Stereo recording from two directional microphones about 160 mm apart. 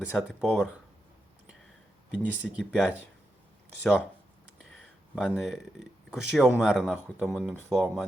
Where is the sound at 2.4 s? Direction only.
5° left (ahead or behind).